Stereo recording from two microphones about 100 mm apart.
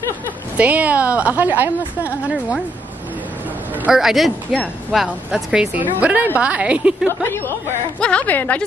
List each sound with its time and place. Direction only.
0.6 s a woman's voice: 15° right (ahead or behind)
3.9 s a woman's voice: centre (ahead or behind)
7.2 s a woman's voice: 25° left (ahead or behind)
8.0 s a woman's voice: 10° left (ahead or behind)